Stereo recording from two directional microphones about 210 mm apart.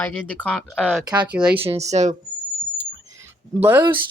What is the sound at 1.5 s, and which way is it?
Speech, 30° right (ahead or behind).